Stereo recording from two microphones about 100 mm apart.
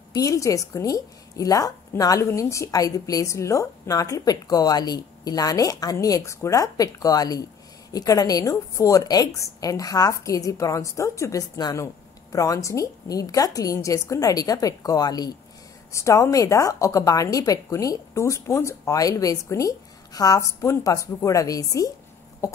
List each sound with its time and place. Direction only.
0.1 s a woman's voice: 35° left (ahead or behind)
15.9 s a woman's voice: 30° left (ahead or behind)